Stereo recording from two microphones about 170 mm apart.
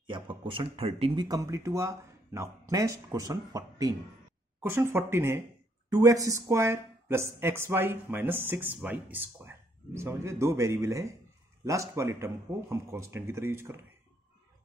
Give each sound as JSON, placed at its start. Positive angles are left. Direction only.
{"t": 0.1, "sound": "speech", "side_deg": -30}